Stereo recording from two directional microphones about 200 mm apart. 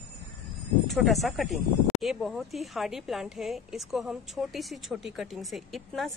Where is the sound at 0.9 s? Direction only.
Centre (ahead or behind).